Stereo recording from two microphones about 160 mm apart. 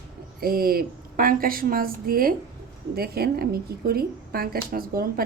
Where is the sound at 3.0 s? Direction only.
75° right (ahead or behind).